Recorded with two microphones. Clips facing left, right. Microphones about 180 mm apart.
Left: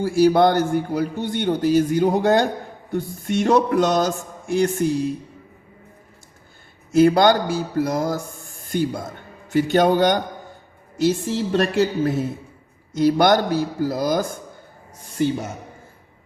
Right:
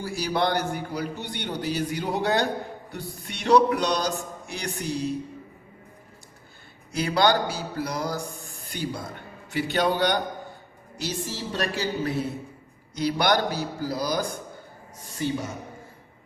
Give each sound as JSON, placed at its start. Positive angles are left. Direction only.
{"t": 0.0, "sound": "a man's voice", "side_deg": 50}
{"t": 6.9, "sound": "a man's voice", "side_deg": 50}